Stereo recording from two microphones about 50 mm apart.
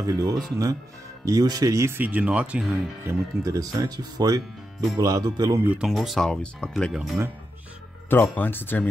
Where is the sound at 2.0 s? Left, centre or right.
Right.